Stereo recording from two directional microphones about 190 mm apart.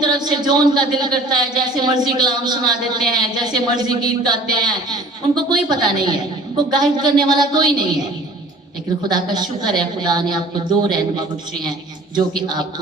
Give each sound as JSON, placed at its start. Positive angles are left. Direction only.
{"t": 0.0, "sound": "speech", "side_deg": -20}
{"t": 9.0, "sound": "speech", "side_deg": -20}
{"t": 12.1, "sound": "speech", "side_deg": -20}